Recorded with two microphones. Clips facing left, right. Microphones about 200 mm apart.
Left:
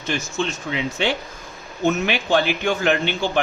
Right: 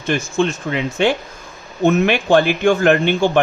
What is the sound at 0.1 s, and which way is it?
Speech, 55° right (ahead or behind).